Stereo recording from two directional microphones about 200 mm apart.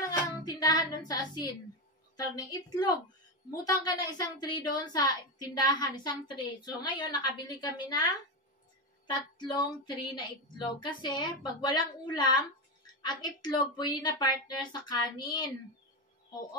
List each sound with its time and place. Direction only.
0.4 s music: 20° left (ahead or behind)
2.1 s a woman's voice: 20° left (ahead or behind)